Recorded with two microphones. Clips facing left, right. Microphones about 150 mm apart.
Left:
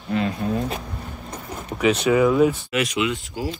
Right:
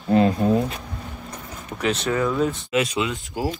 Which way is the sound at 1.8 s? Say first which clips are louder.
Left 5 dB; 5° left (ahead or behind).